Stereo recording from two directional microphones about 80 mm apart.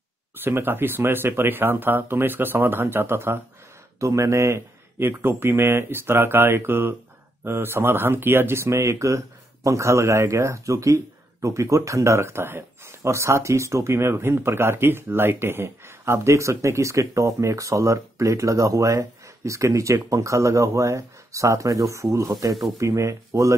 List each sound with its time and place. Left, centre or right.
0.4 s speech: right
4.0 s speech: right